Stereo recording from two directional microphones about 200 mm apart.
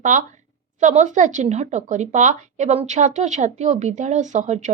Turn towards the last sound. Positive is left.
turn(degrees=-35)  # may be behind; listen again after turning